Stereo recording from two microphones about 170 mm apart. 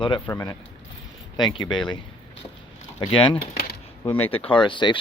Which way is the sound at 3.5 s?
65° left (ahead or behind).